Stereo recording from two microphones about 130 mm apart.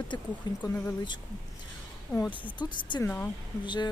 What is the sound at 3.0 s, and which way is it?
Speech, 15° left (ahead or behind).